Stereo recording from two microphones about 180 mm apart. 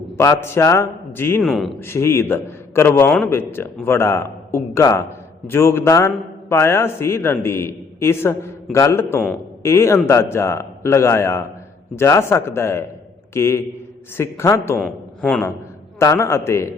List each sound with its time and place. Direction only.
0.2 s a man's voice: 15° left (ahead or behind)
1.4 s speech: centre (ahead or behind)
1.8 s a man's voice: 15° left (ahead or behind)
14.8 s a man's voice: 5° left (ahead or behind)
16.0 s a man's voice: 15° left (ahead or behind)